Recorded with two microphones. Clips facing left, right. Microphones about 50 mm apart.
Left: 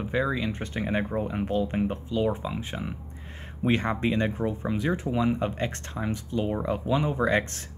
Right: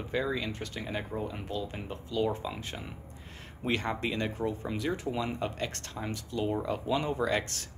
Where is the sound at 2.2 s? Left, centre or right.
Centre.